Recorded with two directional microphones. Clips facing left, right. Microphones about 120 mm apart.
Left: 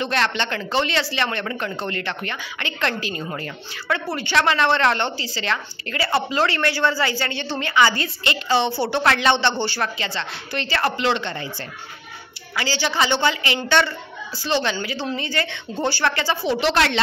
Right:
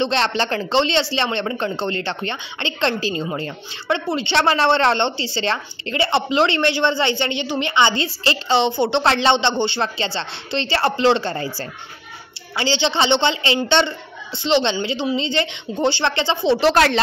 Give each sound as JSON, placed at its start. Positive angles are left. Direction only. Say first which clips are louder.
{"t": 0.0, "sound": "speech", "louder": "right 3 dB", "side_deg": -30}
{"t": 12.5, "sound": "speech", "louder": "right 3 dB", "side_deg": -25}
{"t": 16.5, "sound": "a woman's voice", "louder": "right 4 dB", "side_deg": -40}